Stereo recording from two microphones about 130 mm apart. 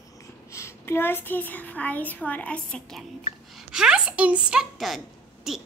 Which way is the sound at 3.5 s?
5° right (ahead or behind).